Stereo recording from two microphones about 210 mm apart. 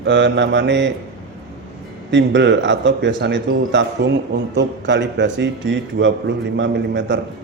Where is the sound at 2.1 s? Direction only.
55° right (ahead or behind).